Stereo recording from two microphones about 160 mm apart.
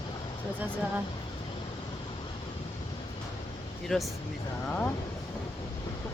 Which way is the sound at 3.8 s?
Centre (ahead or behind).